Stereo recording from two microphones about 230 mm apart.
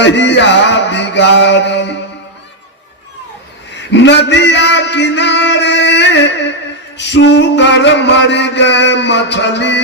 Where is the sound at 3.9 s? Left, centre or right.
Left.